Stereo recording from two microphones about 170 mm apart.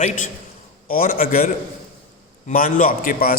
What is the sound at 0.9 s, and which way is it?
A man's voice, 55° left (ahead or behind).